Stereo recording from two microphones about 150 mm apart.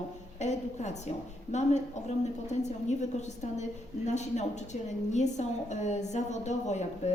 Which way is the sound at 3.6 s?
50° left (ahead or behind).